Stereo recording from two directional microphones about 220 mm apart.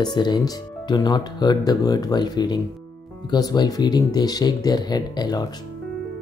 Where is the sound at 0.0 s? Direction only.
20° left (ahead or behind).